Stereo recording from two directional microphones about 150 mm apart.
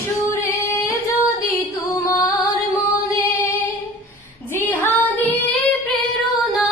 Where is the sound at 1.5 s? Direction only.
20° left (ahead or behind).